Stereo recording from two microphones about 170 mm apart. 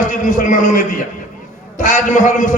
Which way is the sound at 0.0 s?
50° left (ahead or behind).